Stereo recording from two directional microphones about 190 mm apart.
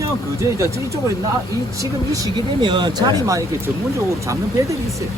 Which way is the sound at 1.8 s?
15° right (ahead or behind).